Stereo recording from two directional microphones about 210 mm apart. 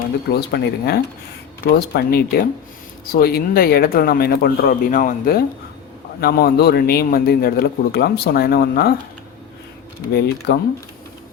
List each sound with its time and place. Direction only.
0.3 s a man's voice: 50° left (ahead or behind)
10.1 s a man's voice: 50° left (ahead or behind)